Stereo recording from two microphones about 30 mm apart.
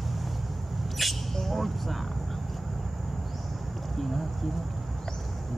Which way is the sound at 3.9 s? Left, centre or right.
Centre.